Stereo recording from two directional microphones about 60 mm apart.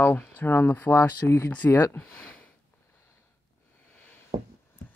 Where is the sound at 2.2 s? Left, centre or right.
Centre.